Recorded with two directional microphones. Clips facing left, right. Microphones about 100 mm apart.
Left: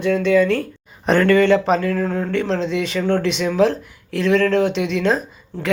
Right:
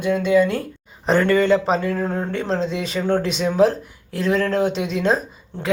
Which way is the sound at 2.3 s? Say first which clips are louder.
Left 2 dB; 35° right (ahead or behind).